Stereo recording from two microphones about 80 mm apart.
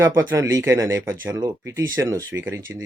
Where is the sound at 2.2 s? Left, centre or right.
Right.